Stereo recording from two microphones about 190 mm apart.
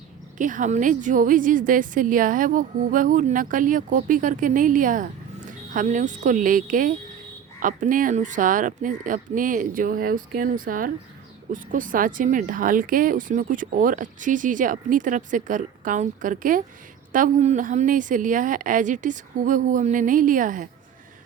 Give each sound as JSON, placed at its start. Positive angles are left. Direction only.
{"t": 0.3, "sound": "speech", "side_deg": -40}